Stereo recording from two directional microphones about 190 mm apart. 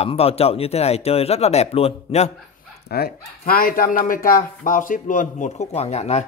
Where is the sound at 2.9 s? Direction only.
55° left (ahead or behind); by 6.3 s 35° left (ahead or behind).